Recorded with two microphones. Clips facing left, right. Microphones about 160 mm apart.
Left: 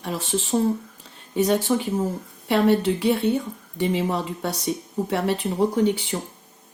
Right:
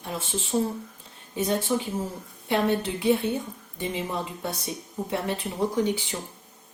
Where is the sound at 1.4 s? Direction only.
70° left (ahead or behind).